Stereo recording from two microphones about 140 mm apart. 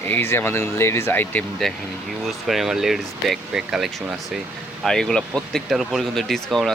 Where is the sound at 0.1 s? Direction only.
15° left (ahead or behind).